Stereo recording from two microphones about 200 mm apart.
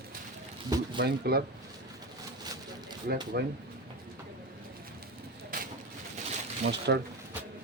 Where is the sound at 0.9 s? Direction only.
50° right (ahead or behind).